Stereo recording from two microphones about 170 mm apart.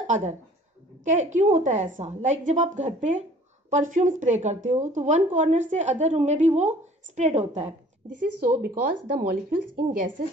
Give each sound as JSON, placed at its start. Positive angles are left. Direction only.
{"t": 0.0, "sound": "a woman's voice", "side_deg": -45}
{"t": 8.4, "sound": "a woman's voice", "side_deg": -65}